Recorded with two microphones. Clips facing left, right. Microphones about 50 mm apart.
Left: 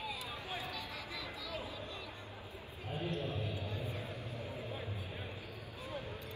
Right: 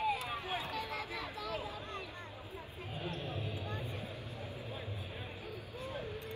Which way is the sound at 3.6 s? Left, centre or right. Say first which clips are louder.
Even; right.